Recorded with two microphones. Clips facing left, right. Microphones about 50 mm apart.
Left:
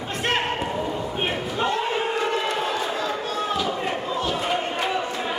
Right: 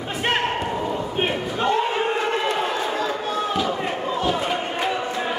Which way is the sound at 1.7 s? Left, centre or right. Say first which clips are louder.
Right 6 dB; centre.